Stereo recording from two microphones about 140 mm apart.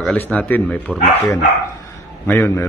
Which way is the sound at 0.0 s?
5° left (ahead or behind).